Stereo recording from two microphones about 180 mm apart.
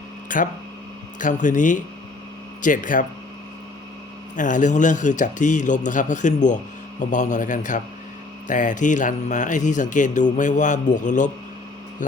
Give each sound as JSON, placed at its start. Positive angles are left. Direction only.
{"t": 0.3, "sound": "a man's voice", "side_deg": 45}
{"t": 4.4, "sound": "a man's voice", "side_deg": 45}